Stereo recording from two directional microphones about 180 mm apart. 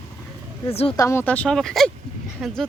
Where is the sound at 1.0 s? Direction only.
15° left (ahead or behind).